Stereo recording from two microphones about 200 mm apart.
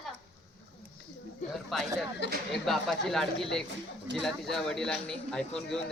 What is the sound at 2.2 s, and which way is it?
Speech, 55° left (ahead or behind).